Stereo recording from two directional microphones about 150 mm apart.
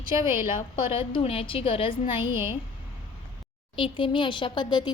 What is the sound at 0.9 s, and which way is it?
A woman's voice, 40° left (ahead or behind).